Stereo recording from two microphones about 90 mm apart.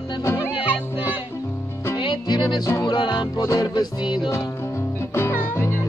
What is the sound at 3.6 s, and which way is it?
Music, 55° left (ahead or behind).